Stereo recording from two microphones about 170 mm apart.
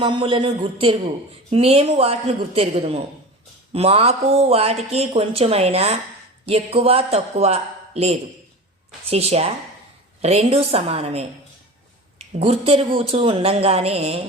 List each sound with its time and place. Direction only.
0.0 s speech: 30° right (ahead or behind)
12.4 s speech: 35° right (ahead or behind)